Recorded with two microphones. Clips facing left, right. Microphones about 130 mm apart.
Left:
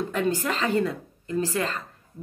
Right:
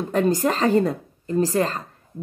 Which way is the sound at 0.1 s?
40° right (ahead or behind).